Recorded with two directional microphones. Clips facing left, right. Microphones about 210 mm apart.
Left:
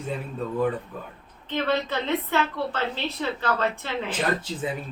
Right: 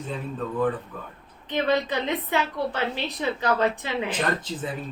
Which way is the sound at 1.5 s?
15° right (ahead or behind).